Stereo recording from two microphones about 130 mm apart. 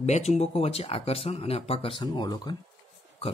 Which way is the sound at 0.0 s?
60° left (ahead or behind).